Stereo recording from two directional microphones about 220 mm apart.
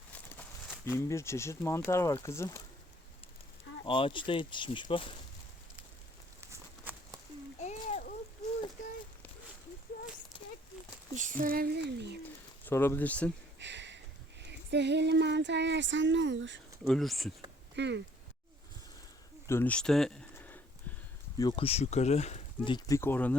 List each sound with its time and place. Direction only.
0.1 s speech: 5° left (ahead or behind)
3.8 s speech: 25° left (ahead or behind)
6.4 s walk: 10° right (ahead or behind)
7.6 s splash: 30° left (ahead or behind)
10.3 s a sound: 20° left (ahead or behind)
11.1 s speech: 35° right (ahead or behind)
12.6 s speech: 10° left (ahead or behind)
13.6 s a sound: 55° right (ahead or behind)
16.8 s speech: centre (ahead or behind)
17.7 s a sound: 50° right (ahead or behind)
19.5 s speech: 10° left (ahead or behind)
21.3 s speech: 20° left (ahead or behind)